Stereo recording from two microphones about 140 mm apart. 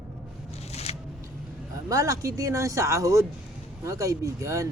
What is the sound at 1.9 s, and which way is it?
Speech, 25° right (ahead or behind).